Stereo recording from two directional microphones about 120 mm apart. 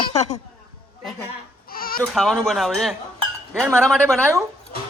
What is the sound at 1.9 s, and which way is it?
Speech, centre (ahead or behind).